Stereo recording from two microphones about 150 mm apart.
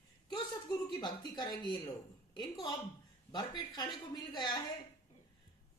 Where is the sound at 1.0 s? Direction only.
25° left (ahead or behind).